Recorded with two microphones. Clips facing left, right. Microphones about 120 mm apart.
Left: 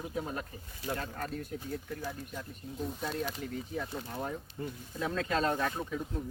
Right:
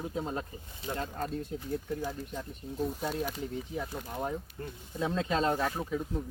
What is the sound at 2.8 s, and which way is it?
Speech, 5° right (ahead or behind).